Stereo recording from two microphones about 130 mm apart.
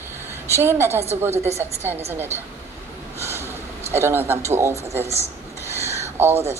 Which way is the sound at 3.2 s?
20° right (ahead or behind).